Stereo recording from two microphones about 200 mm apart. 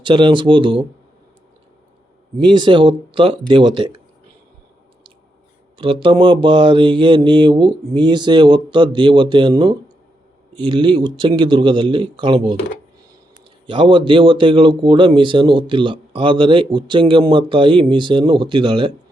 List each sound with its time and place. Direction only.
0.0 s speech: 25° right (ahead or behind)
2.4 s speech: 25° right (ahead or behind)
5.7 s speech: 25° right (ahead or behind)
13.7 s speech: 25° right (ahead or behind)